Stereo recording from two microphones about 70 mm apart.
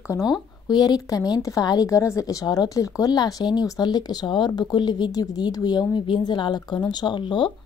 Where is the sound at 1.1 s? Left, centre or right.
Left.